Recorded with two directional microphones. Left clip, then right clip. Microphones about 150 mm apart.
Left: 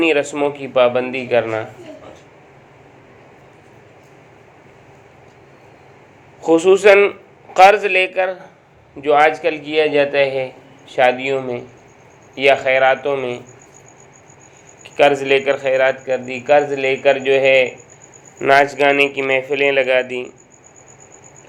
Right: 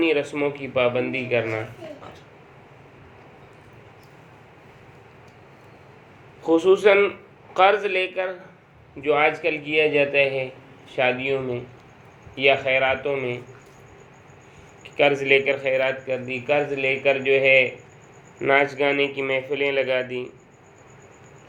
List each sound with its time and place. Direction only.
0.0 s a man's voice: 25° left (ahead or behind)
6.4 s a man's voice: 25° left (ahead or behind)
14.8 s a man's voice: 25° left (ahead or behind)